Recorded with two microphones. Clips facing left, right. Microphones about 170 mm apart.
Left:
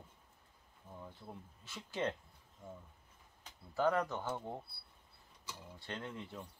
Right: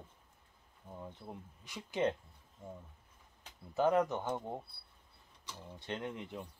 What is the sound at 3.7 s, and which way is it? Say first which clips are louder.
Speech: right 3 dB; 20° right (ahead or behind).